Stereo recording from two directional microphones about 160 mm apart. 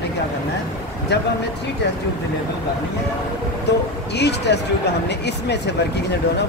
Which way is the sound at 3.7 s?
90° left.